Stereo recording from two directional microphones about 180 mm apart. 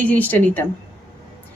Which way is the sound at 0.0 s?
10° left (ahead or behind).